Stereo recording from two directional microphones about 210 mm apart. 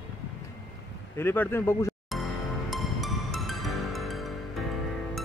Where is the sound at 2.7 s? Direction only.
Centre (ahead or behind).